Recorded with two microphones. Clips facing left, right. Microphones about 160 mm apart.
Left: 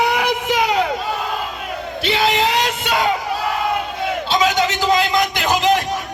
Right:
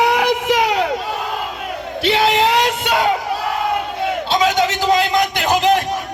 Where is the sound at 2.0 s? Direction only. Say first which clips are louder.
Right 3 dB; 65° right (ahead or behind).